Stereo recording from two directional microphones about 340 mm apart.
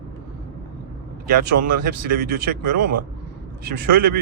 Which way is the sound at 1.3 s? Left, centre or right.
Right.